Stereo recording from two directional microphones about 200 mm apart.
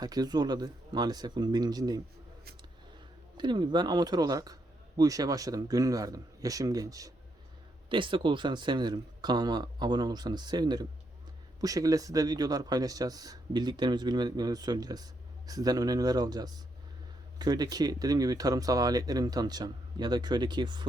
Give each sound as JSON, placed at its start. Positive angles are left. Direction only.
{"t": 0.0, "sound": "speech", "side_deg": -20}
{"t": 3.3, "sound": "speech", "side_deg": -20}